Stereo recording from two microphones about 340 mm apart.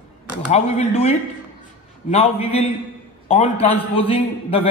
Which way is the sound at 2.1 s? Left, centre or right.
Centre.